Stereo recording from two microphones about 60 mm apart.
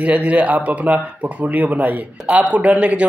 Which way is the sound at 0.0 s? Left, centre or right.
Right.